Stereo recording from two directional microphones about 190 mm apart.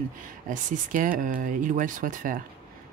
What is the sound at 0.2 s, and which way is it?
Speech, 45° right (ahead or behind).